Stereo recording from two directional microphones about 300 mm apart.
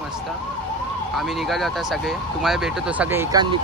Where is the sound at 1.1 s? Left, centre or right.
Centre.